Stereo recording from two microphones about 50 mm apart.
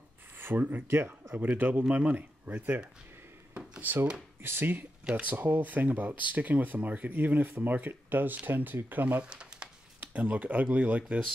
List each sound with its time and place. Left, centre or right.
0.4 s speech: right
0.8 s speech: right
1.6 s speech: right
3.8 s speech: right
9.2 s a sound: centre
9.9 s speech: right